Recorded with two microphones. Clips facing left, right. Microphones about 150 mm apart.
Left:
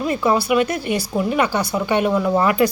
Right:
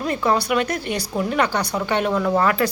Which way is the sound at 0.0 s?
5° left (ahead or behind).